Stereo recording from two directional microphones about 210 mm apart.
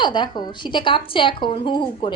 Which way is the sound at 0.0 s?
20° left (ahead or behind).